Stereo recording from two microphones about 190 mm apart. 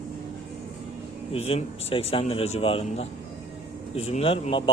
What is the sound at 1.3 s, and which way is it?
A man's voice, 30° left (ahead or behind).